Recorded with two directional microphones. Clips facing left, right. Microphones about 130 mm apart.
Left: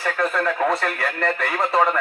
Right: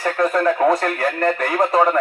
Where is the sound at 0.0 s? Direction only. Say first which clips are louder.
Right 5 dB; 40° right (ahead or behind).